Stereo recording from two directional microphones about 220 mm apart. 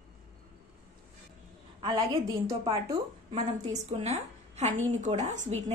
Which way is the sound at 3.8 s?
30° right (ahead or behind).